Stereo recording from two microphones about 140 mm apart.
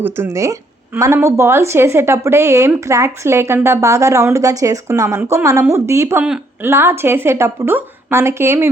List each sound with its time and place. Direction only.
0.0 s a woman's voice: 20° right (ahead or behind)